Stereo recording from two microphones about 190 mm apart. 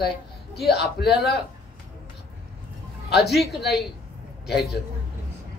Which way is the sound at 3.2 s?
Centre (ahead or behind).